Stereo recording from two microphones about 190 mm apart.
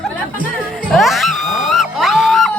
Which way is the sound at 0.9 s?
Centre (ahead or behind).